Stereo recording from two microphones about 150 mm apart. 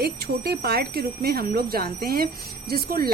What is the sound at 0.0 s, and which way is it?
A woman's voice, 90° right.